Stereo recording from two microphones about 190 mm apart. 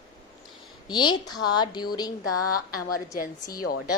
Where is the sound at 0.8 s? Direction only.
25° left (ahead or behind).